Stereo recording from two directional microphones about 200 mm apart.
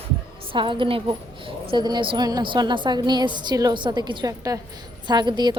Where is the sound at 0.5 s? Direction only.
25° right (ahead or behind).